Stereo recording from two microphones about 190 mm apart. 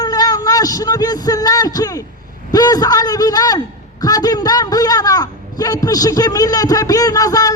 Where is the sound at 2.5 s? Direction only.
20° left (ahead or behind).